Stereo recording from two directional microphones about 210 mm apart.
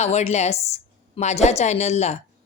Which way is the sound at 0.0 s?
30° left (ahead or behind).